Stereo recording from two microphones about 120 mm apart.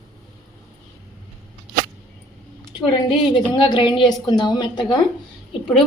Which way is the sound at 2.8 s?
40° left (ahead or behind).